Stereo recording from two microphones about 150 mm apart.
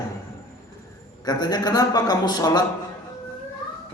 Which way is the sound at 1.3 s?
25° left (ahead or behind).